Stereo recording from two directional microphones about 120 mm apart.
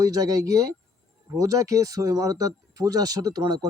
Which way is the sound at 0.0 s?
30° right (ahead or behind).